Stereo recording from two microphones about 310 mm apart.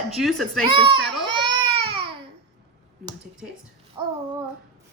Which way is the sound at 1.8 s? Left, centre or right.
Centre.